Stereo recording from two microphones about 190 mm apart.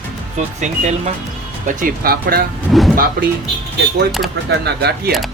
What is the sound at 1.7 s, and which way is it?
Speech, 45° right (ahead or behind).